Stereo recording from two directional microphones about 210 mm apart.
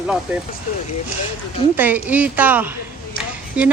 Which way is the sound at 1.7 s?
10° right (ahead or behind).